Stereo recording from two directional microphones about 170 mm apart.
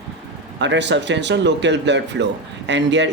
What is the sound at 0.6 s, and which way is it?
Speech, 90° right.